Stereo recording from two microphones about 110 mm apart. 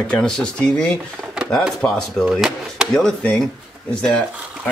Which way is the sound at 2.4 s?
5° right (ahead or behind).